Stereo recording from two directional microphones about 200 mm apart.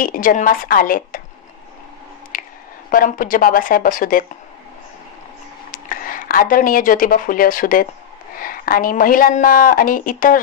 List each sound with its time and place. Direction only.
0.0 s a woman's voice: 40° left (ahead or behind)
2.3 s a sound: 45° left (ahead or behind)
2.9 s a woman's voice: 45° left (ahead or behind)
5.7 s a woman's voice: 45° left (ahead or behind)